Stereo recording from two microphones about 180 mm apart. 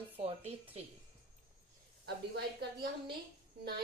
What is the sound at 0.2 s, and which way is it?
Speech, 35° right (ahead or behind).